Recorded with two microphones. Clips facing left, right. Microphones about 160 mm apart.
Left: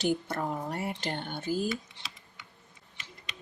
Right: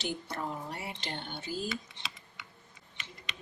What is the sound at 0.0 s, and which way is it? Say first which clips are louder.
Speech: left 7 dB; 50° left (ahead or behind).